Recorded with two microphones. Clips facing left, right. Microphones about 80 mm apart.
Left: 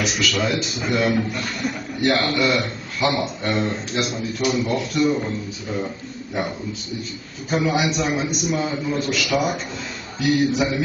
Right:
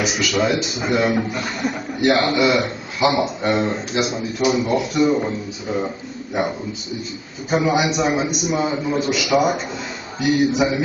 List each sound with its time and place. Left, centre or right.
0.0 s speech: centre
7.5 s speech: centre